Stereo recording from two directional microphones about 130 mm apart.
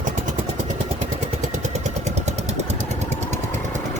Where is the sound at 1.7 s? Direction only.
60° right (ahead or behind).